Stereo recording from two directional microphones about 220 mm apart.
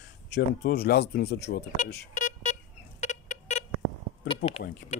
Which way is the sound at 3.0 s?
35° left (ahead or behind).